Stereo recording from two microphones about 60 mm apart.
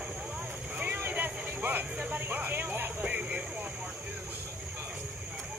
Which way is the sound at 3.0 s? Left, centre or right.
Right.